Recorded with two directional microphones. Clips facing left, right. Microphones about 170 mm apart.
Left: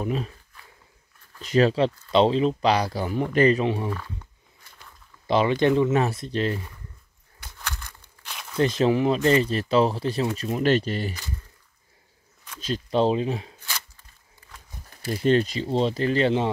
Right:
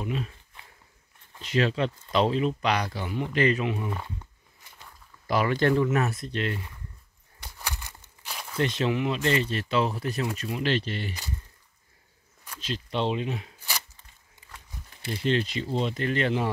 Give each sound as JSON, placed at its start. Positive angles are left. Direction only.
{"t": 0.0, "sound": "speech", "side_deg": 40}
{"t": 1.4, "sound": "speech", "side_deg": 40}
{"t": 5.2, "sound": "speech", "side_deg": 25}
{"t": 7.4, "sound": "a sound", "side_deg": -15}
{"t": 8.5, "sound": "speech", "side_deg": 35}
{"t": 10.5, "sound": "speech", "side_deg": 45}
{"t": 12.5, "sound": "speech", "side_deg": 40}
{"t": 15.0, "sound": "speech", "side_deg": 45}
{"t": 15.6, "sound": "speech", "side_deg": 30}